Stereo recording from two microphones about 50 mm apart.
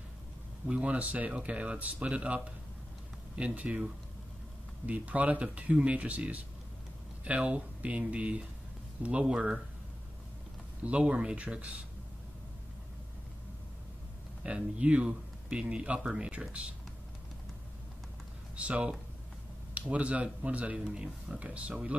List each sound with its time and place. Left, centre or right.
0.7 s speech: right
10.8 s speech: right
14.4 s speech: right
18.6 s speech: right
20.8 s speech: centre